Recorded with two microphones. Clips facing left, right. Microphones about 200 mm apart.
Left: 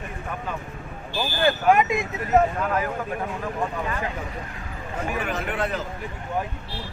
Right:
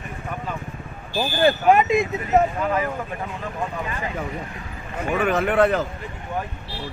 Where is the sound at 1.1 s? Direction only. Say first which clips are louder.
Right 4 dB; 30° right (ahead or behind).